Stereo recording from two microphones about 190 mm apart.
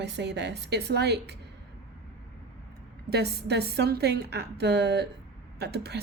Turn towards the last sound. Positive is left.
turn(degrees=-60)  # may be behind; listen again after turning